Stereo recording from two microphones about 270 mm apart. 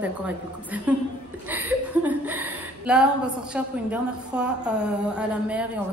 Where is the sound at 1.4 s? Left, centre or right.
Centre.